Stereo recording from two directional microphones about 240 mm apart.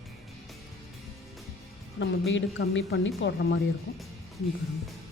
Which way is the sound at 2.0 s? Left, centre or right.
Left.